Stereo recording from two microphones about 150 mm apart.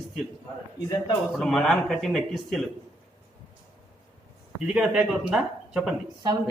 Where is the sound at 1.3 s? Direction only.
Centre (ahead or behind).